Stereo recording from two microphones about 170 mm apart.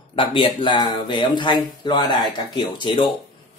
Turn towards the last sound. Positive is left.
turn(degrees=30)  # may be behind; listen again after turning